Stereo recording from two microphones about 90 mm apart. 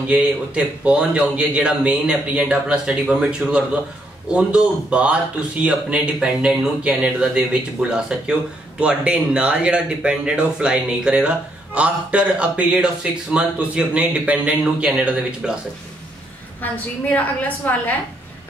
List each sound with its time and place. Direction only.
0.0 s speech: 15° right (ahead or behind)
17.1 s a woman's voice: 20° left (ahead or behind)